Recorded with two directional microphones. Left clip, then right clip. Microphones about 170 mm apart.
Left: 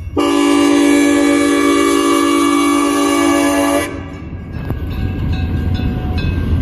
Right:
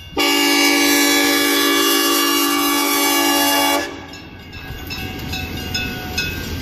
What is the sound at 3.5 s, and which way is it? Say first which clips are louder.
Vehicle: left 2 dB; 25° right (ahead or behind).